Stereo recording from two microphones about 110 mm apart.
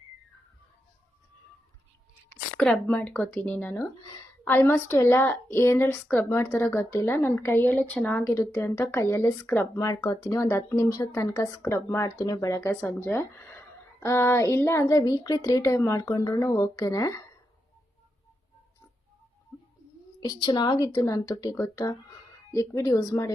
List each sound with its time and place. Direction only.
2.6 s a woman's voice: 10° left (ahead or behind)
8.2 s a woman's voice: 25° left (ahead or behind)
20.2 s a woman's voice: 40° left (ahead or behind)
22.5 s a woman's voice: 30° left (ahead or behind)